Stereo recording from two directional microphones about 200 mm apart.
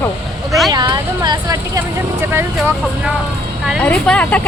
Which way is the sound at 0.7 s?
20° right (ahead or behind).